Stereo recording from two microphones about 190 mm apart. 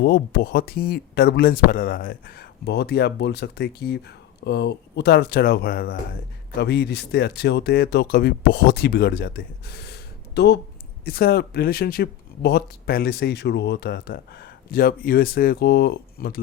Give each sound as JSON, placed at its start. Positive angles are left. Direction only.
{"t": 0.0, "sound": "speech", "side_deg": 55}